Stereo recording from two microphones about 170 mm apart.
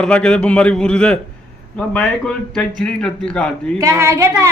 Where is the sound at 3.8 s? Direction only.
15° right (ahead or behind).